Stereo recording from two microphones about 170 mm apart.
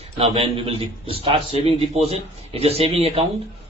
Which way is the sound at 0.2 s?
35° right (ahead or behind).